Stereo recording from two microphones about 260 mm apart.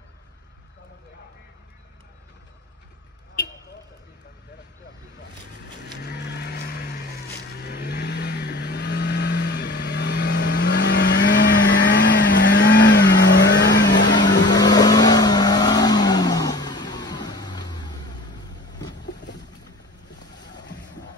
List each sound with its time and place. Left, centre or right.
5.9 s vehicle: left
14.5 s vehicle: centre
19.0 s boat: left